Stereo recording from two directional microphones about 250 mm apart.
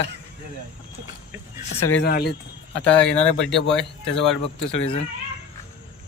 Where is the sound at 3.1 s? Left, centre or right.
Left.